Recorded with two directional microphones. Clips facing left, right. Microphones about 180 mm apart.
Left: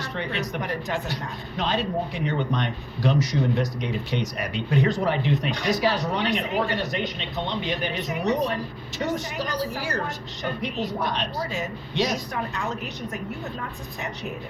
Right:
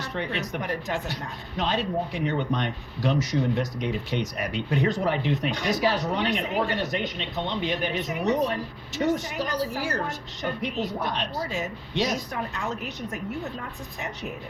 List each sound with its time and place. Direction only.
0.0 s speech: 50° right (ahead or behind)